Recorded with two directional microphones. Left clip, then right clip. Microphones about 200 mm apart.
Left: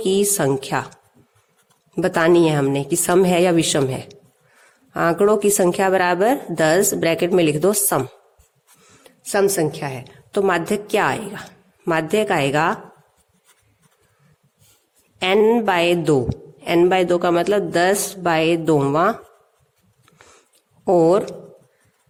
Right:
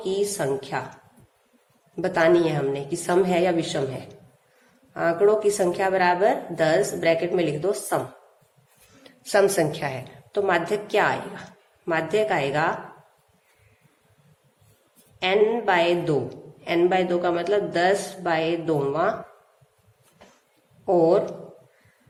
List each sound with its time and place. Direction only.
0.0 s a woman's voice: 45° left (ahead or behind)
2.0 s a woman's voice: 45° left (ahead or behind)
9.0 s a woman's voice: 35° left (ahead or behind)
15.2 s a woman's voice: 45° left (ahead or behind)
20.8 s a woman's voice: 45° left (ahead or behind)